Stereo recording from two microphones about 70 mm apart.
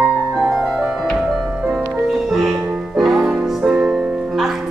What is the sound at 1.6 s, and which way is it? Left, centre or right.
Music, centre.